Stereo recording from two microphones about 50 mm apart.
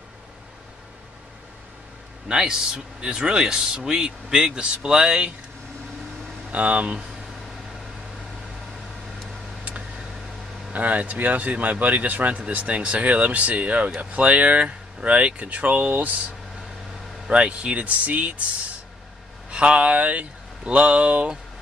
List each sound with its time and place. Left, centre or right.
2.2 s speech: centre
6.5 s speech: right
10.7 s speech: right
17.3 s speech: right
19.5 s speech: right